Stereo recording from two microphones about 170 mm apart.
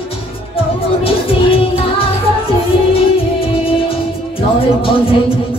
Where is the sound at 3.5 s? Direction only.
35° left (ahead or behind).